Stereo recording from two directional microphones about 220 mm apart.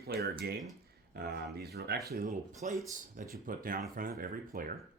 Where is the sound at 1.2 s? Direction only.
45° right (ahead or behind).